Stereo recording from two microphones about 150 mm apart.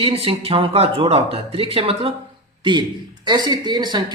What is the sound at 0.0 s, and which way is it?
Speech, 40° right (ahead or behind).